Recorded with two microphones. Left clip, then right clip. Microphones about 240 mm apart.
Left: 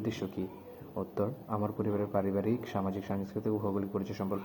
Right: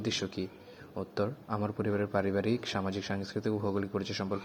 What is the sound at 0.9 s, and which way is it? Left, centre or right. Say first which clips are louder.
A man's voice: even; right.